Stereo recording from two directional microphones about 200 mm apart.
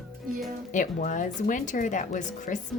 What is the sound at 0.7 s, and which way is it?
A woman's voice, 40° left (ahead or behind).